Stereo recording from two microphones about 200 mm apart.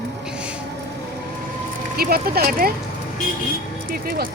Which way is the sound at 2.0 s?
50° right (ahead or behind).